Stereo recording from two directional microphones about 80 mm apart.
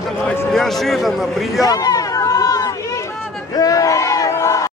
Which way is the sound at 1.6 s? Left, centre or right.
Left.